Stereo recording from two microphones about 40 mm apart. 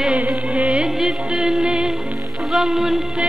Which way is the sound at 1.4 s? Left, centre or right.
Centre.